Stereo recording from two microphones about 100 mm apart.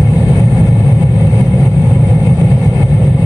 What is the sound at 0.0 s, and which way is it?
Vehicle, 10° right (ahead or behind).